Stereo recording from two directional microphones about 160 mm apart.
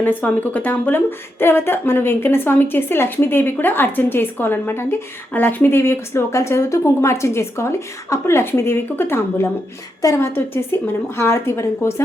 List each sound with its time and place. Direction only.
0.0 s speech: 10° left (ahead or behind)